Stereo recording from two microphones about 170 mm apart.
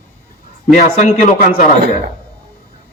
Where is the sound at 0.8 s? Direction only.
45° left (ahead or behind).